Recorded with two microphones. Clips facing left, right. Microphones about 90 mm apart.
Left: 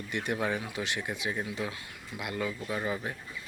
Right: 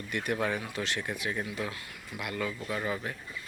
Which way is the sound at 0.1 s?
20° left (ahead or behind).